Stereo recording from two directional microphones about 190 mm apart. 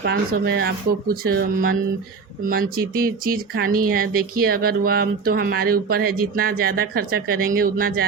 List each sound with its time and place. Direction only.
0.0 s speech: 60° right (ahead or behind)